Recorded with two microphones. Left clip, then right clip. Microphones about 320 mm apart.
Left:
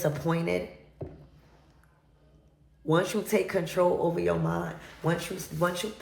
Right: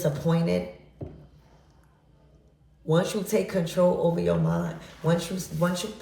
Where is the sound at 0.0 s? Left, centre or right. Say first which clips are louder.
Right 2 dB; centre.